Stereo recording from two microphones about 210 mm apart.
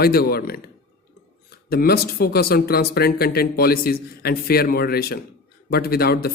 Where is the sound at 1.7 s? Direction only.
45° left (ahead or behind).